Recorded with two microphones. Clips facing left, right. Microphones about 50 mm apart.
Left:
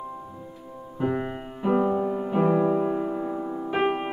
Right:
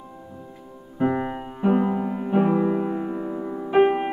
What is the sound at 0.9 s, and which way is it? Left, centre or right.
Music, centre.